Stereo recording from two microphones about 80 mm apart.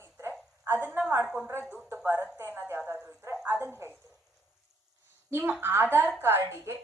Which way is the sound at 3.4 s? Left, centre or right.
Right.